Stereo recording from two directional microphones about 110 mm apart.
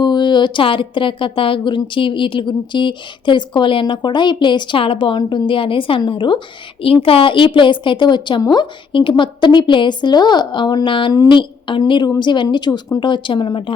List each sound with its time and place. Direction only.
0.0 s speech: 45° left (ahead or behind)
8.9 s speech: 50° left (ahead or behind)